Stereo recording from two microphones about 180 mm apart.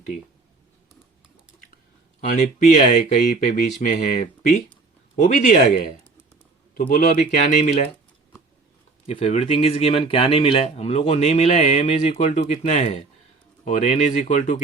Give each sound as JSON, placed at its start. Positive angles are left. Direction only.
{"t": 2.3, "sound": "speech", "side_deg": 45}
{"t": 9.0, "sound": "speech", "side_deg": 35}